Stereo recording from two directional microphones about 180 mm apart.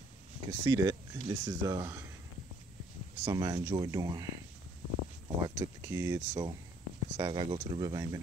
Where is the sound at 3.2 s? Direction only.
20° right (ahead or behind).